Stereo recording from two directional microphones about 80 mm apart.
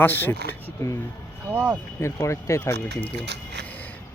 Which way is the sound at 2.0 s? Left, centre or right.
Left.